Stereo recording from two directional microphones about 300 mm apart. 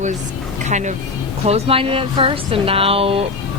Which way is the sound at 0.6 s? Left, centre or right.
Right.